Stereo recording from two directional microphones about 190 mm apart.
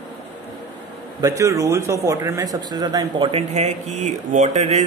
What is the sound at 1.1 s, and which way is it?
Speech, 15° right (ahead or behind).